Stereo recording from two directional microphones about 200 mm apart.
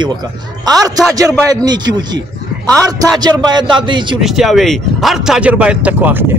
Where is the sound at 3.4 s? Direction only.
20° right (ahead or behind).